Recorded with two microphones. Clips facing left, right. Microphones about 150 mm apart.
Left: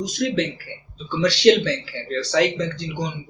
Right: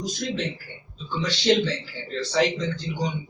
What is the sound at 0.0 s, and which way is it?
Speech, 80° left.